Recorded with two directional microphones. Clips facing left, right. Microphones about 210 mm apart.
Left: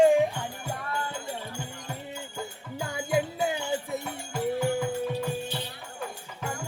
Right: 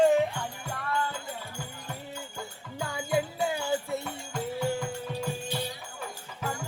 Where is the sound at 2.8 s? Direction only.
20° left (ahead or behind).